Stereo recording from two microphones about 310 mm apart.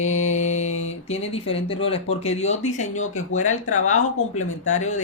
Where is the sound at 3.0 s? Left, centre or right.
Left.